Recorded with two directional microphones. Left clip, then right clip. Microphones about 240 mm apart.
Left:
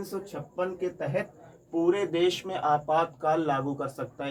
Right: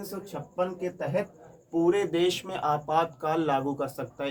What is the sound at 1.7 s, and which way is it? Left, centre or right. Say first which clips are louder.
Speech: right 1 dB; centre.